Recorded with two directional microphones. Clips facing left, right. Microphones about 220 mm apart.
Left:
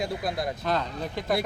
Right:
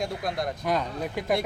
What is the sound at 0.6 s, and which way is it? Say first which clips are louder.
Speech: right 3 dB; 10° right (ahead or behind).